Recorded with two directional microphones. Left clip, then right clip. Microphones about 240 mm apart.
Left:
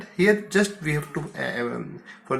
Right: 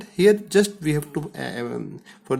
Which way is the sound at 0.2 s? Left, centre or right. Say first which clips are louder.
Right 3 dB; right.